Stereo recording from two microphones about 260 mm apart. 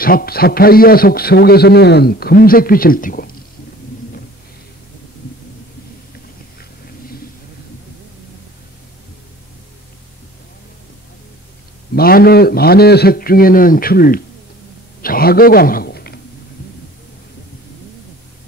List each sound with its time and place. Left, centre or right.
0.0 s a man's voice: left
11.9 s a man's voice: left